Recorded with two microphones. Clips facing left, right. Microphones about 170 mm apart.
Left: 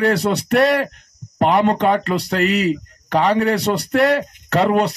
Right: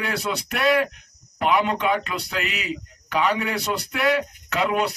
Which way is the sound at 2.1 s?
45° left (ahead or behind).